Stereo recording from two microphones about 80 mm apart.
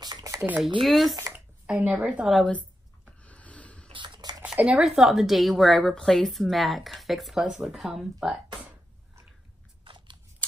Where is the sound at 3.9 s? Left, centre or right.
Right.